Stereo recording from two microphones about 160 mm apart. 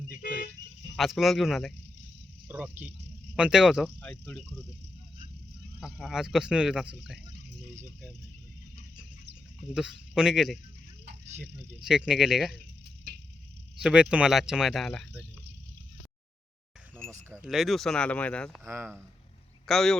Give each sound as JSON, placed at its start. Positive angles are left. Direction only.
{"t": 0.2, "sound": "vehicle", "side_deg": 65}
{"t": 0.9, "sound": "speech", "side_deg": 0}
{"t": 5.8, "sound": "speech", "side_deg": 0}
{"t": 9.6, "sound": "speech", "side_deg": -5}
{"t": 11.8, "sound": "speech", "side_deg": -5}
{"t": 13.8, "sound": "speech", "side_deg": -5}
{"t": 17.1, "sound": "speech", "side_deg": -15}
{"t": 17.4, "sound": "speech", "side_deg": 0}
{"t": 18.6, "sound": "speech", "side_deg": -15}
{"t": 19.6, "sound": "speech", "side_deg": 0}